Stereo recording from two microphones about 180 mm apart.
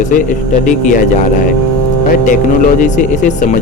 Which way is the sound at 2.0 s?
45° left (ahead or behind).